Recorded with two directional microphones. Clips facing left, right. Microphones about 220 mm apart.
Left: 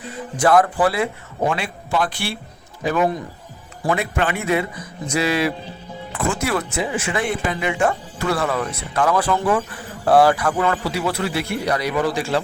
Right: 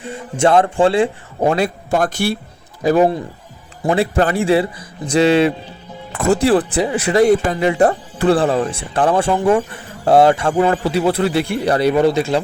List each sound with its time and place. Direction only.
0.0 s speech: 25° right (ahead or behind)
6.1 s a man's voice: 40° right (ahead or behind); by 12.4 s 20° right (ahead or behind)